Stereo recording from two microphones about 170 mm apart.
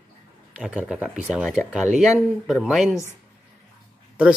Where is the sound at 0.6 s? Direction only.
5° right (ahead or behind).